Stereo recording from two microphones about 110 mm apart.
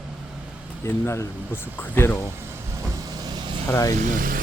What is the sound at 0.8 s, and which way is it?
Speech, 25° left (ahead or behind).